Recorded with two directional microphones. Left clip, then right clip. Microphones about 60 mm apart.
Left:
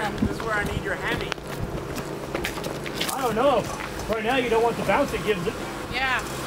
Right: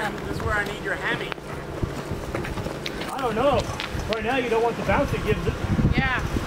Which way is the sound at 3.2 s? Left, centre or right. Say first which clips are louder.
Even; centre.